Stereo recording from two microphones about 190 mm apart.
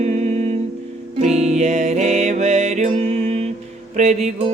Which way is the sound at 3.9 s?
35° right (ahead or behind).